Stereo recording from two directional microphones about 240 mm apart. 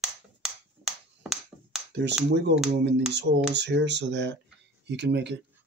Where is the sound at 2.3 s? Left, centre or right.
Right.